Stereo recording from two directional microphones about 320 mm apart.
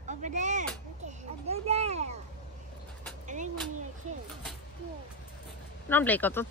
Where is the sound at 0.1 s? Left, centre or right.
Right.